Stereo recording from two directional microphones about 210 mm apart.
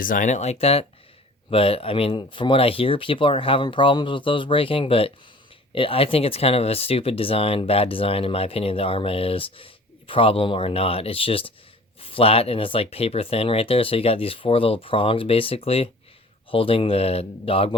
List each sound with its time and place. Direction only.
0.0 s speech: 40° left (ahead or behind)